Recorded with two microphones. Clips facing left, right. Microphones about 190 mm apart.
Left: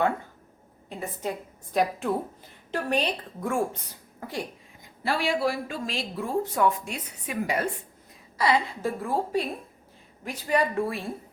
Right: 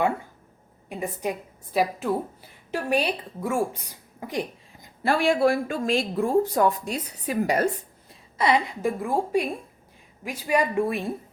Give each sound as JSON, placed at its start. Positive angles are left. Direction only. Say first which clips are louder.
{"t": 0.9, "sound": "a woman's voice", "louder": "right 3 dB", "side_deg": -15}
{"t": 5.0, "sound": "speech", "louder": "right 5 dB", "side_deg": -50}
{"t": 8.4, "sound": "a woman's voice", "louder": "right 2 dB", "side_deg": -20}